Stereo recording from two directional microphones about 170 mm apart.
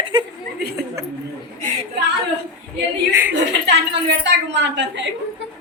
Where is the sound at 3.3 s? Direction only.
90° right.